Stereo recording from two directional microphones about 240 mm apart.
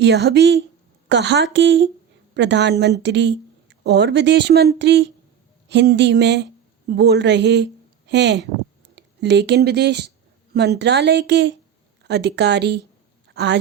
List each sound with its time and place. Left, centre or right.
0.0 s a woman's voice: right